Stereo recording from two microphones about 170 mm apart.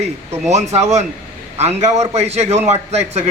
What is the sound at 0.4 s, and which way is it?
A man's voice, 40° right (ahead or behind).